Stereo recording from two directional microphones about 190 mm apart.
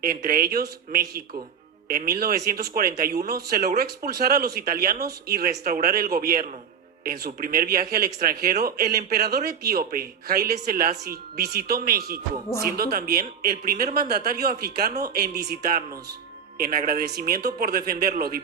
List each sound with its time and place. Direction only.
0.0 s speech: 50° right (ahead or behind)